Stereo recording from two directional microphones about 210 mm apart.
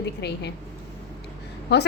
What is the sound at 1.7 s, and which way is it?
Speech, 55° left (ahead or behind).